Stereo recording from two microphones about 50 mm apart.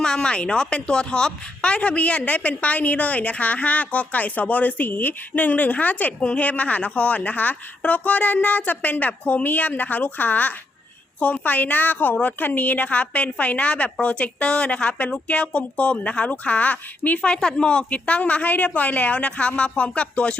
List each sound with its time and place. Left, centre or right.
0.0 s a woman's voice: centre